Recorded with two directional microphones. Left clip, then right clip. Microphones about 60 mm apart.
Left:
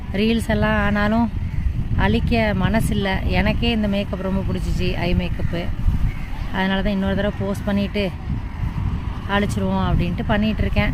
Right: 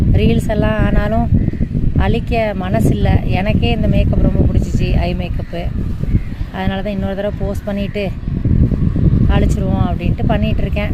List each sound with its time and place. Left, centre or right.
0.1 s a sound: left
0.5 s speech: left
2.0 s speech: centre
4.8 s speech: centre
6.6 s speech: left
9.3 s speech: left
9.6 s speech: left